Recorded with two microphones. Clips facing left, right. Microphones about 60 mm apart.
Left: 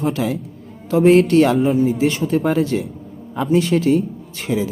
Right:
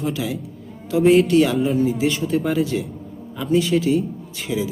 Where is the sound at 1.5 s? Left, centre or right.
Centre.